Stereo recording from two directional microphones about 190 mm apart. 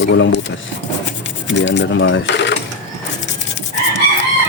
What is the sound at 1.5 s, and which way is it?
Speech, 70° left (ahead or behind).